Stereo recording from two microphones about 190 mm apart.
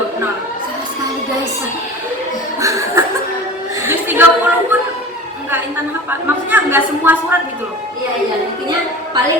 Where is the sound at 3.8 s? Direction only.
10° right (ahead or behind).